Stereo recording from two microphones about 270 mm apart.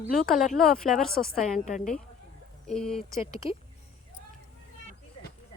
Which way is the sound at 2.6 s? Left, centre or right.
Centre.